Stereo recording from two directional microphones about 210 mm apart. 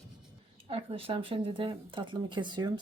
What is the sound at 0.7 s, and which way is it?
Speech, 25° right (ahead or behind).